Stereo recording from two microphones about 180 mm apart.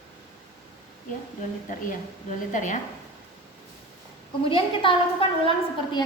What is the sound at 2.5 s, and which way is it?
Speech, 45° left (ahead or behind).